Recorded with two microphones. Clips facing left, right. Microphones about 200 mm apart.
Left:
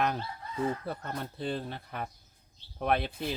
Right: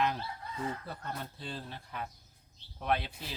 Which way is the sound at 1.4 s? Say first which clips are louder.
Left 8 dB; 60° left (ahead or behind).